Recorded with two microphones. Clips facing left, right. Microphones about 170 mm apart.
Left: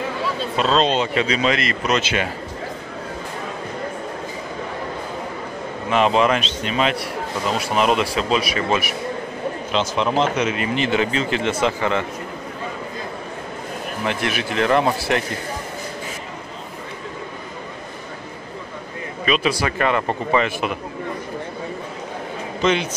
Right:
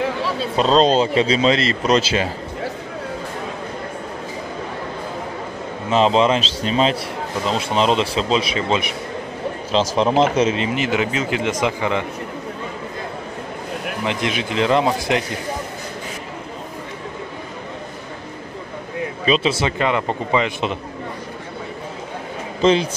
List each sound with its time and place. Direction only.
0.6 s speech: 35° right (ahead or behind)
5.9 s speech: 30° right (ahead or behind)
9.7 s speech: 35° right (ahead or behind)
10.7 s speech: 10° right (ahead or behind)
14.0 s speech: 20° right (ahead or behind)
19.2 s speech: 30° right (ahead or behind)
22.6 s a man's voice: 30° right (ahead or behind)